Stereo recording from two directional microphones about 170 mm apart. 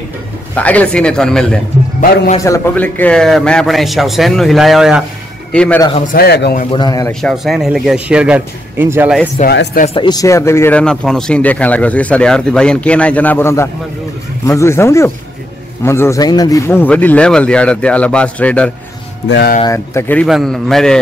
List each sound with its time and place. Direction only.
0.6 s a man's voice: 10° left (ahead or behind)
2.4 s a man's voice: 15° left (ahead or behind)
5.8 s a man's voice: 30° left (ahead or behind)
6.1 s speech: 75° left (ahead or behind)
6.7 s a man's voice: 25° left (ahead or behind)
7.1 s a man's voice: 5° left (ahead or behind); by 9.1 s 15° right (ahead or behind)
9.4 s speech: 45° left (ahead or behind)
9.9 s speech: 25° left (ahead or behind); by 18.7 s 5° left (ahead or behind)
19.2 s speech: 90° left
19.6 s speech: 15° left (ahead or behind)
20.2 s a man's voice: centre (ahead or behind)